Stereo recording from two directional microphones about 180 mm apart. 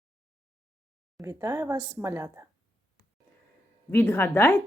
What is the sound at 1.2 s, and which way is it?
Speech, 15° right (ahead or behind).